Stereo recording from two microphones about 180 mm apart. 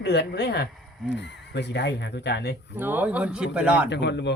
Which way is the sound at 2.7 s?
10° right (ahead or behind).